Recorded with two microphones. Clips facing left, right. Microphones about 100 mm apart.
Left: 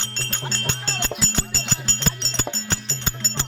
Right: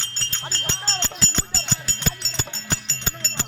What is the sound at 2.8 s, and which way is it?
Music, 20° left (ahead or behind).